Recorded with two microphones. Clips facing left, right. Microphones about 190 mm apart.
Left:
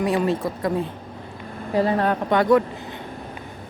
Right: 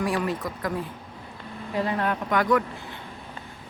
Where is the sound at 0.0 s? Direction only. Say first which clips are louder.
Left 5 dB; 25° left (ahead or behind).